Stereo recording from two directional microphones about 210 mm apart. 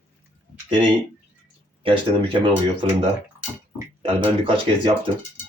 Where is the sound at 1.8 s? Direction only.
25° right (ahead or behind).